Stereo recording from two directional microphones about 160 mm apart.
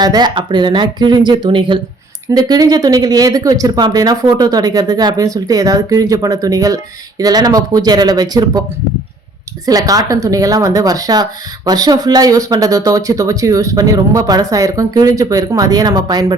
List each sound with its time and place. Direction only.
0.0 s speech: 25° right (ahead or behind)
9.6 s speech: 25° right (ahead or behind)